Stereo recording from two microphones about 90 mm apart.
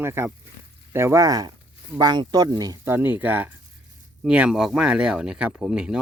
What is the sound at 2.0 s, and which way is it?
Speech, 55° right (ahead or behind).